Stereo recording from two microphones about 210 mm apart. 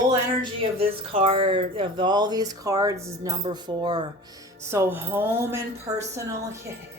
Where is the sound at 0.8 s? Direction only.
25° right (ahead or behind).